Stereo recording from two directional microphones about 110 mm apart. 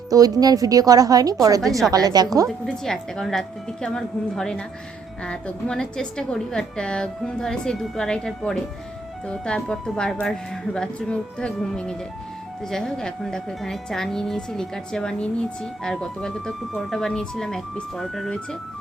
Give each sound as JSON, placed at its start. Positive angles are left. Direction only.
{"t": 0.1, "sound": "a woman's voice", "side_deg": -35}
{"t": 2.5, "sound": "a woman's voice", "side_deg": 0}